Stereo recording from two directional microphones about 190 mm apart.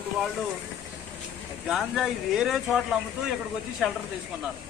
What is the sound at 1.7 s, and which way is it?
Speech, centre (ahead or behind).